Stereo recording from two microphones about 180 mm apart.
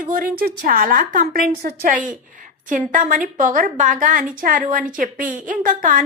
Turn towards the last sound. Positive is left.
turn(degrees=-50)  # may be behind; listen again after turning